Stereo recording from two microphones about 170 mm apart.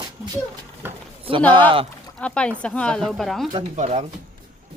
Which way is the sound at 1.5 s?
30° right (ahead or behind).